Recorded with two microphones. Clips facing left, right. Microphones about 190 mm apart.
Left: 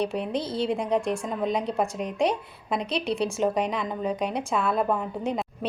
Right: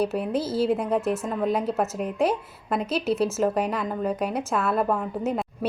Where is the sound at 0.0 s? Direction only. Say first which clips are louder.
Right 2 dB; 5° right (ahead or behind).